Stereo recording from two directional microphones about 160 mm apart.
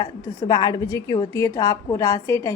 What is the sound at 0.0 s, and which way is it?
A woman's voice, 25° left (ahead or behind).